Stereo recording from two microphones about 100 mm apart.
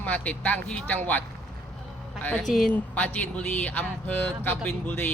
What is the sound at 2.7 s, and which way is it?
Speech, 15° left (ahead or behind).